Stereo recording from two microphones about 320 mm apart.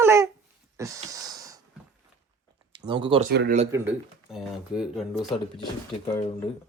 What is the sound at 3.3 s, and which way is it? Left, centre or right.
Speech, right.